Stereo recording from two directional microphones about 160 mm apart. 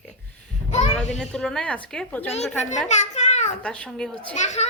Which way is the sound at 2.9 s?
45° left (ahead or behind).